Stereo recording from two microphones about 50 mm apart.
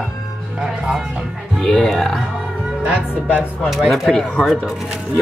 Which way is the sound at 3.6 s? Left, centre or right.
Centre.